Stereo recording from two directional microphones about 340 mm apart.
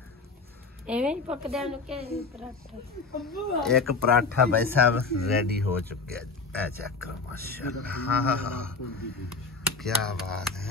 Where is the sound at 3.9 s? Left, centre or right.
Right.